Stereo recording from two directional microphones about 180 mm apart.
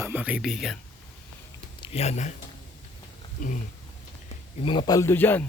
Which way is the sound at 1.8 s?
35° left (ahead or behind).